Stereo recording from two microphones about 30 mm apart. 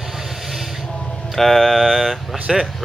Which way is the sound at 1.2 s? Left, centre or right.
Centre.